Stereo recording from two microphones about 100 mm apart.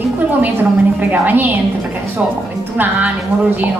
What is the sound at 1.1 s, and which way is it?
Speech, 20° right (ahead or behind).